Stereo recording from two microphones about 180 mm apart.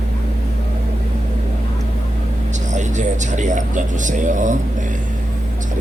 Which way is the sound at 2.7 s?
40° right (ahead or behind).